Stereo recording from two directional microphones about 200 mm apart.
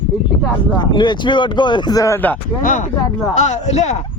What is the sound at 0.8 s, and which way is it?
Speech, 20° left (ahead or behind).